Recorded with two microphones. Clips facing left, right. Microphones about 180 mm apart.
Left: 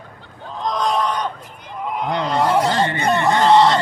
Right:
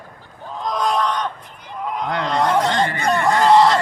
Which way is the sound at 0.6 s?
Centre (ahead or behind).